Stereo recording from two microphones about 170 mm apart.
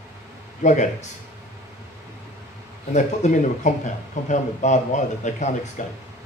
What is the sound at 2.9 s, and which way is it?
Speech, 45° left (ahead or behind).